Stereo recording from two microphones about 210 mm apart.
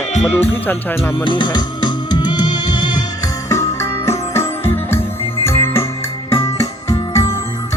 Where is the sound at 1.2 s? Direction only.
20° left (ahead or behind).